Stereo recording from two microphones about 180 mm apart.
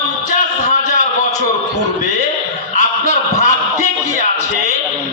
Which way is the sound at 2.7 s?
40° left (ahead or behind).